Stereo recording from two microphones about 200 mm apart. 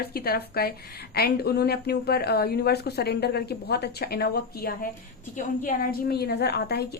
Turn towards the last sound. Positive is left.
turn(degrees=50)  # may be behind; listen again after turning